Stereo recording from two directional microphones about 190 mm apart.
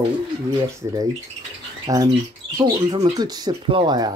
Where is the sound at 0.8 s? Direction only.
15° right (ahead or behind).